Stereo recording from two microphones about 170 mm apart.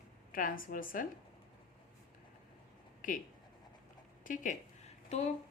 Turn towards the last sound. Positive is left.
turn(degrees=40)  # may be behind; listen again after turning